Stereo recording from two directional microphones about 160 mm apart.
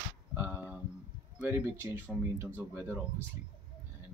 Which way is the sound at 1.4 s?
10° right (ahead or behind).